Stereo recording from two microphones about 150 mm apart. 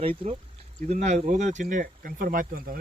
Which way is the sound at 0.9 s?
50° right (ahead or behind).